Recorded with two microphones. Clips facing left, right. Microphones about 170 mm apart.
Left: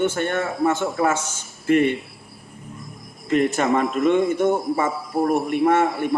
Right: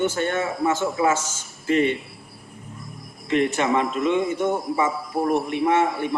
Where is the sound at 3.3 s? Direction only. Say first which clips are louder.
Left 2 dB; 45° left (ahead or behind).